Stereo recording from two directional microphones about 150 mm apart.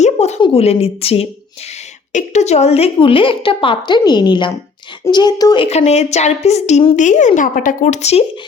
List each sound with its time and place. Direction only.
0.0 s a sound: 50° left (ahead or behind)
0.3 s a woman's voice: 35° left (ahead or behind)
5.6 s a woman's voice: 45° left (ahead or behind)